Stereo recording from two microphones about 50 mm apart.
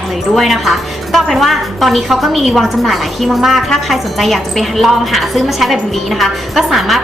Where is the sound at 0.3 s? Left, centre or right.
Centre.